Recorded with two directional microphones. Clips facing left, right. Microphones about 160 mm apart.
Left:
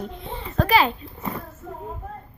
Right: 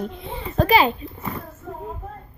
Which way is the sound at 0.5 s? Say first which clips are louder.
Right 2 dB; 20° right (ahead or behind).